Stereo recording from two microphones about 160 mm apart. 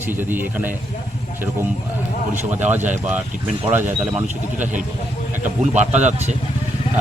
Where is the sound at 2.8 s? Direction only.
10° right (ahead or behind).